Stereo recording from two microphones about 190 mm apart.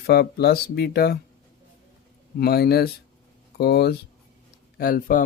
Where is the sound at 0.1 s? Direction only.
60° left (ahead or behind).